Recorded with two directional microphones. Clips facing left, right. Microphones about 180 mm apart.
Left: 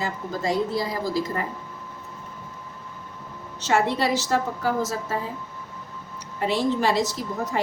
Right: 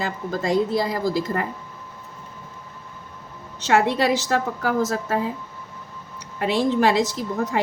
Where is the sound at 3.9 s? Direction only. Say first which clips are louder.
Right 2 dB; 60° right (ahead or behind).